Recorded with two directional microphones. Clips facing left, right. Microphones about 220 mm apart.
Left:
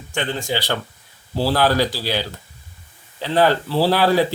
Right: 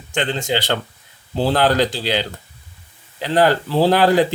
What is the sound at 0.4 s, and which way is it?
Speech, 20° right (ahead or behind).